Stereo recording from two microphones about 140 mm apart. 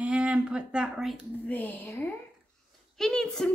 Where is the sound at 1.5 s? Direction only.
10° left (ahead or behind).